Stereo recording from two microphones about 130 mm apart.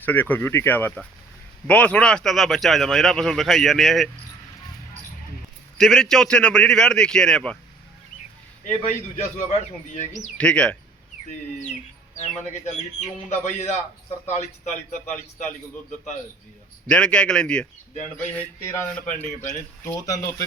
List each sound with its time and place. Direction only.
0.0 s speech: 15° left (ahead or behind)
5.7 s speech: 5° left (ahead or behind)
8.6 s speech: 65° left (ahead or behind)
10.3 s speech: 10° left (ahead or behind)
12.1 s speech: 65° left (ahead or behind)
16.9 s speech: 5° left (ahead or behind)
19.0 s speech: 70° left (ahead or behind)
19.8 s speech: 25° left (ahead or behind)